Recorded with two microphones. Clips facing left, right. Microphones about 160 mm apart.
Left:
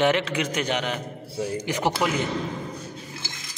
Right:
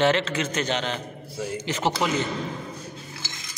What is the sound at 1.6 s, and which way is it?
Speech, 15° left (ahead or behind).